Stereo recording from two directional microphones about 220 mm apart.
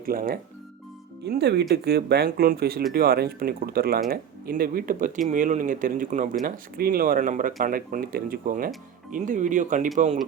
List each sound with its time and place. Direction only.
0.0 s speech: 40° right (ahead or behind)